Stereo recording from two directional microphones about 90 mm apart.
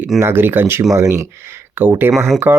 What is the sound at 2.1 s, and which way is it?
Speech, centre (ahead or behind).